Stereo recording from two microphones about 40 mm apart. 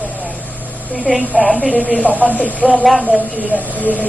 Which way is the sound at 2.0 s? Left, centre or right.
Right.